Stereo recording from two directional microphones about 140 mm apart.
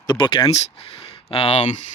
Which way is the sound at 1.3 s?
45° left (ahead or behind).